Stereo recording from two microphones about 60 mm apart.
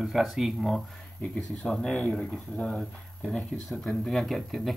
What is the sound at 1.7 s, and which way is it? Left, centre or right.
Speech, centre.